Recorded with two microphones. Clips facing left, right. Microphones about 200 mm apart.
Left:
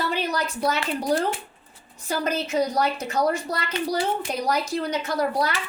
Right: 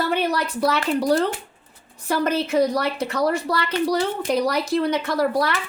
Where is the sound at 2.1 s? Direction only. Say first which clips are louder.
Right 4 dB; 60° right (ahead or behind).